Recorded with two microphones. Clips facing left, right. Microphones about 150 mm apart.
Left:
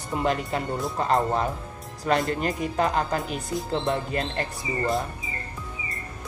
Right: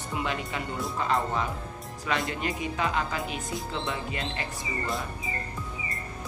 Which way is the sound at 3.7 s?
45° left (ahead or behind).